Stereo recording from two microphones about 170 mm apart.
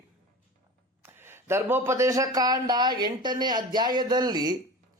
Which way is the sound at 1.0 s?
15° right (ahead or behind).